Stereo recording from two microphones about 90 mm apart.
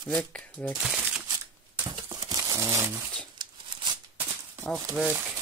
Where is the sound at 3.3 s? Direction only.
60° right (ahead or behind).